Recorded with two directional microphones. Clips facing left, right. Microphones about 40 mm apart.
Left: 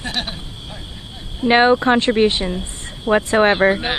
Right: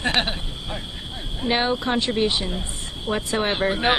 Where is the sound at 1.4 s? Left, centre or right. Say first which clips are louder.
Left 9 dB; left.